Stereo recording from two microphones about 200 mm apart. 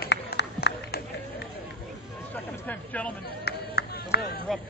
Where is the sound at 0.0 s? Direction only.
55° left (ahead or behind).